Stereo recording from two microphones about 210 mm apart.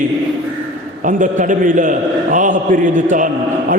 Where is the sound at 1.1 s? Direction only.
40° right (ahead or behind).